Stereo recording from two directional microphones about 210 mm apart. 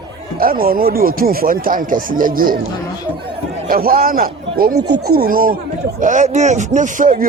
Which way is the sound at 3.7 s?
45° right (ahead or behind).